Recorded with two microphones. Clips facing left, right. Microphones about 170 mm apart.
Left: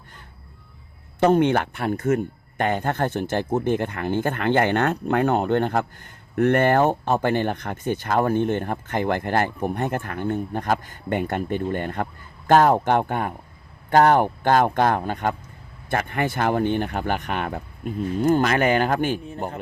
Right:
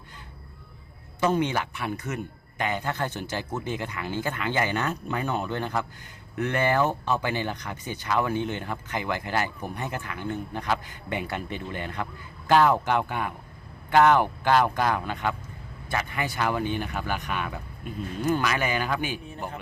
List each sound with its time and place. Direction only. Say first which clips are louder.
1.2 s speech: left 7 dB; 60° left (ahead or behind)